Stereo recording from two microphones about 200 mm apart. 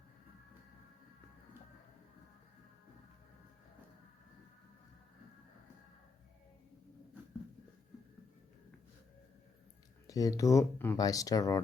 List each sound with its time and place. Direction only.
10.1 s speech: 15° left (ahead or behind)